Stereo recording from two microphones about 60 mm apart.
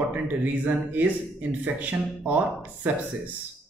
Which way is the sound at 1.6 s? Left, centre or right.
Right.